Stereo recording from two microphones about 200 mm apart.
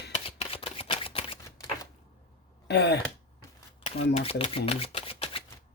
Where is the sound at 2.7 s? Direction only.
55° left (ahead or behind).